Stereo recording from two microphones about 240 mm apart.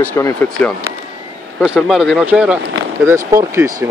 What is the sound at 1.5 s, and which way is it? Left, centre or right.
Speech, centre.